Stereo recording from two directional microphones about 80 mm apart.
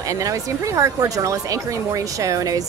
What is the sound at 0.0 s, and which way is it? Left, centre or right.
Speech, right.